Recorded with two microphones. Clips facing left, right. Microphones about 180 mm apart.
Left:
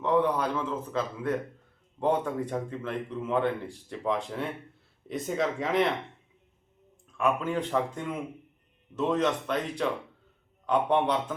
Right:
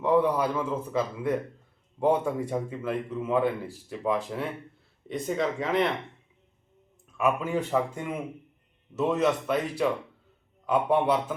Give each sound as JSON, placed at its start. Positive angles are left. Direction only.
{"t": 0.0, "sound": "a man's voice", "side_deg": -10}
{"t": 7.2, "sound": "a man's voice", "side_deg": -5}